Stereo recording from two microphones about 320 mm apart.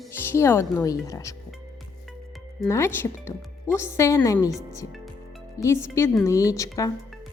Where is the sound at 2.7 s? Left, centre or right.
Centre.